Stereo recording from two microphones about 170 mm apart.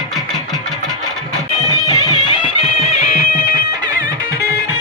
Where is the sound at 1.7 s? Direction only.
25° left (ahead or behind); by 3.1 s 40° left (ahead or behind).